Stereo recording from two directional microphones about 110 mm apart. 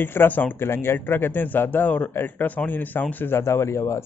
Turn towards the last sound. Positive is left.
turn(degrees=25)  # may be behind; listen again after turning